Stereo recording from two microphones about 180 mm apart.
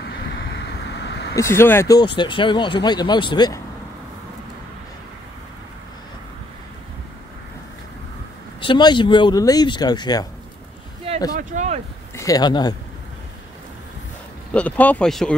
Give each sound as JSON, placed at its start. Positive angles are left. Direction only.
{"t": 1.0, "sound": "vehicle", "side_deg": 75}
{"t": 1.3, "sound": "speech", "side_deg": 15}
{"t": 8.5, "sound": "speech", "side_deg": 25}
{"t": 11.3, "sound": "speech", "side_deg": -40}
{"t": 12.2, "sound": "speech", "side_deg": 20}
{"t": 14.5, "sound": "speech", "side_deg": 10}